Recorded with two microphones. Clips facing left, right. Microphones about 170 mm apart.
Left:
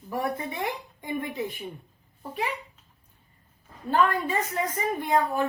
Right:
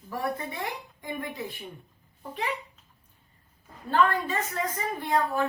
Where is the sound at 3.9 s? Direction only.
15° left (ahead or behind).